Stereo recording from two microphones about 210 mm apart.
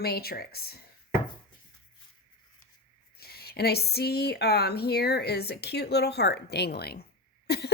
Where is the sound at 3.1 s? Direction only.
50° left (ahead or behind).